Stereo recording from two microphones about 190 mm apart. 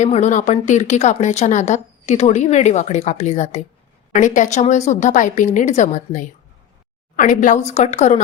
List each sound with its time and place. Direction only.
0.0 s speech: 35° left (ahead or behind)